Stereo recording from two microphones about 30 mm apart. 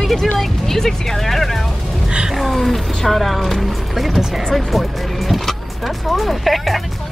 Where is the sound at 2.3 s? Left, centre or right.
Centre.